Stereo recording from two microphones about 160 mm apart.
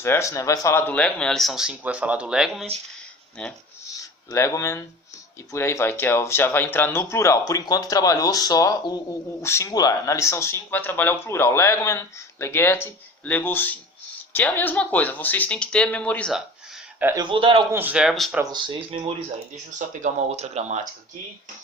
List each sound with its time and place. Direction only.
0.0 s speech: 15° left (ahead or behind)
4.3 s speech: 20° left (ahead or behind)
17.2 s speech: 30° right (ahead or behind)
17.7 s speech: 10° right (ahead or behind)
18.5 s speech: 30° right (ahead or behind)
20.0 s speech: 50° right (ahead or behind)